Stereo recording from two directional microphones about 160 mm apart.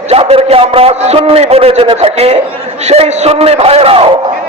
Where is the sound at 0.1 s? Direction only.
40° right (ahead or behind).